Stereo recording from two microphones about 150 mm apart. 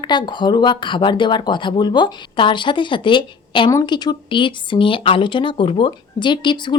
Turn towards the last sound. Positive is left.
turn(degrees=30)  # may be behind; listen again after turning